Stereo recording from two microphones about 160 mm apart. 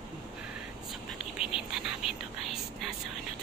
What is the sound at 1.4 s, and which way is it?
Whispering, 5° right (ahead or behind).